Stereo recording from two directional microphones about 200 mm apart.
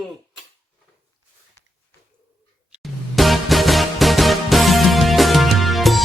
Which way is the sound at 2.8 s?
Centre (ahead or behind).